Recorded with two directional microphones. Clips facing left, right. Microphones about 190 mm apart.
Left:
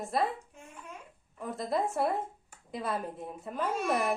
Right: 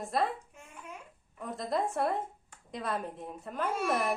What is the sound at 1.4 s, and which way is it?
Speech, centre (ahead or behind).